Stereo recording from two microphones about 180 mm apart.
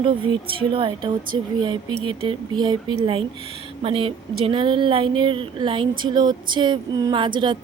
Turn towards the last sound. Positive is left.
turn(degrees=-25)  # may be behind; listen again after turning